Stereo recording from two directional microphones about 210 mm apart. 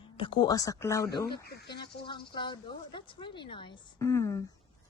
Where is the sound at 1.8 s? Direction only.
25° left (ahead or behind).